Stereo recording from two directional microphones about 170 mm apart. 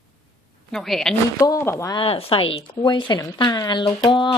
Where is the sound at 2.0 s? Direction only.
35° left (ahead or behind).